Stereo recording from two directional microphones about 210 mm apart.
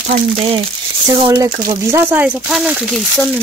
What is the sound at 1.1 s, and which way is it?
Speech, 15° right (ahead or behind).